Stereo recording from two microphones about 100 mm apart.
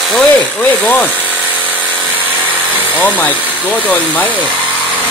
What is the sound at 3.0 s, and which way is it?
Speech, 15° left (ahead or behind).